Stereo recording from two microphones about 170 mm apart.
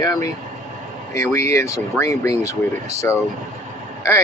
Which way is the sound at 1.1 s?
15° left (ahead or behind).